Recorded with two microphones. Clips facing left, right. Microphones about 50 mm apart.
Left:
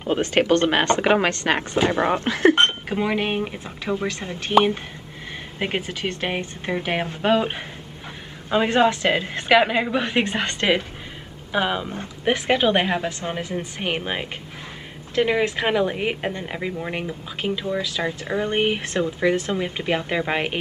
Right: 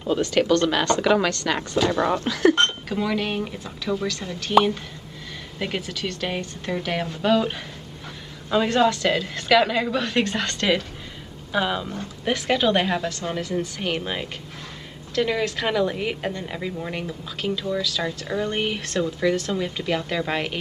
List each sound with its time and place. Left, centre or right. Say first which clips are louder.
0.0 s speech: left 1 dB; left
5.6 s speech: left 2 dB; left